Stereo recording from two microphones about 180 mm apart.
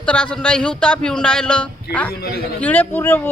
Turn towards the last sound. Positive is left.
turn(degrees=10)  # may be behind; listen again after turning